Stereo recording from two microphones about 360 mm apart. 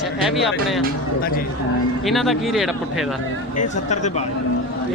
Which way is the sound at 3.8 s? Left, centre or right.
Centre.